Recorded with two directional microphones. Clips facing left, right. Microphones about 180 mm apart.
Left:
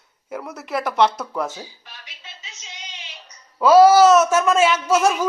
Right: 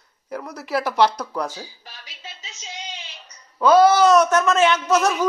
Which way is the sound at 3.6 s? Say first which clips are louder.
Left 3 dB; 5° left (ahead or behind).